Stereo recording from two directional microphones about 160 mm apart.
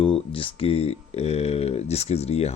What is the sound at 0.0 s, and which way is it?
Speech, 35° left (ahead or behind).